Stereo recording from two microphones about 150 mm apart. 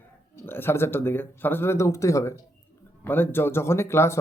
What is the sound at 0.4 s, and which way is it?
A man's voice, 15° left (ahead or behind).